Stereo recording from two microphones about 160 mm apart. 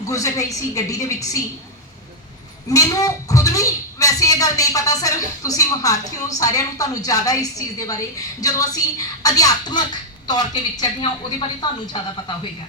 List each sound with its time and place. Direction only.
0.1 s a woman's voice: 20° left (ahead or behind)
2.6 s a woman's voice: 20° left (ahead or behind)